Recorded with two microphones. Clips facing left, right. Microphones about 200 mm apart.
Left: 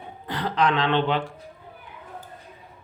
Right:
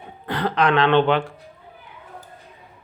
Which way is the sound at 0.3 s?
60° right (ahead or behind).